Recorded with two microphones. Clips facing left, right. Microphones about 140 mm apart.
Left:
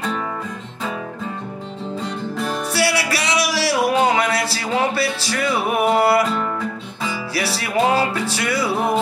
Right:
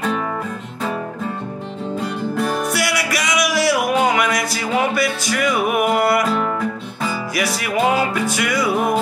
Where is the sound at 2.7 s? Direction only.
30° left (ahead or behind).